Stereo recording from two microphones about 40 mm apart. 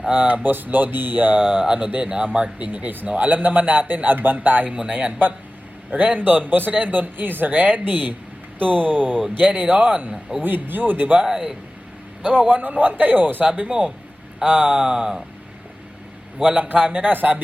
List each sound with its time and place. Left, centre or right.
0.1 s speech: right
2.0 s speech: right
10.1 s a man's voice: centre
10.4 s speech: right
11.2 s a man's voice: centre
12.4 s speech: right
13.4 s speech: right
16.4 s speech: right